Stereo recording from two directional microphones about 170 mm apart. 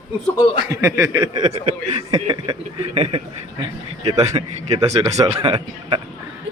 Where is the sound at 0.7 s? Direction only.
20° right (ahead or behind).